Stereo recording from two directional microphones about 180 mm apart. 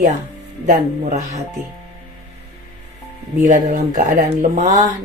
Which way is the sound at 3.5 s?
45° right (ahead or behind).